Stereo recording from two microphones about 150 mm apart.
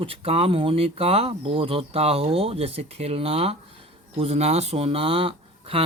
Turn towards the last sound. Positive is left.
turn(degrees=-40)  # may be behind; listen again after turning